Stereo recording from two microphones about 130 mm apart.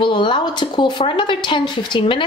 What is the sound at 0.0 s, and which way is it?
A woman's voice, 40° left (ahead or behind).